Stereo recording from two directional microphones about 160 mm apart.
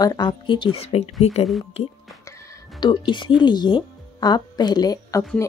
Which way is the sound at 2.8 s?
30° left (ahead or behind).